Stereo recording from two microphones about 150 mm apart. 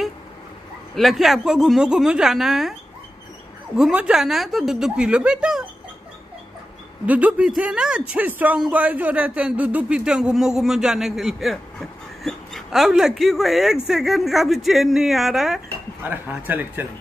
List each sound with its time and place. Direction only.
0.9 s a man's voice: centre (ahead or behind)
3.7 s a man's voice: 5° right (ahead or behind)
7.1 s a man's voice: 10° right (ahead or behind)